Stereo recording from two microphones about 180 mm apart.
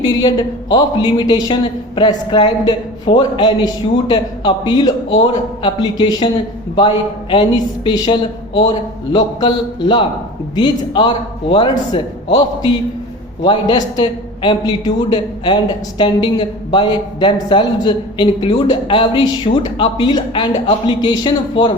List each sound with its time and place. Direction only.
0.2 s a man's voice: 25° left (ahead or behind)